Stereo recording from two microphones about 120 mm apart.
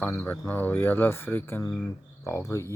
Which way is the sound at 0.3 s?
15° left (ahead or behind).